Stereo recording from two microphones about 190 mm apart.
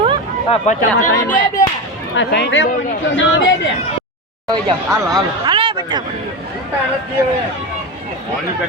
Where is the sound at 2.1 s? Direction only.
70° left (ahead or behind).